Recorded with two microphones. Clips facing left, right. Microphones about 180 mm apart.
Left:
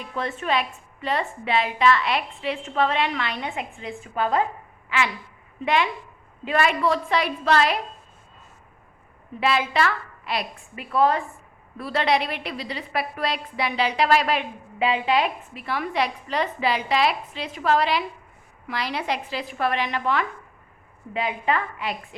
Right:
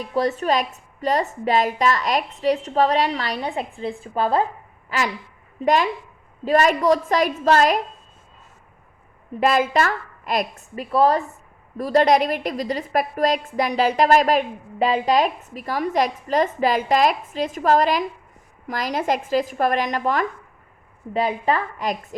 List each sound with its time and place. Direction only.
0.0 s a woman's voice: 35° right (ahead or behind)
9.4 s a woman's voice: 45° right (ahead or behind)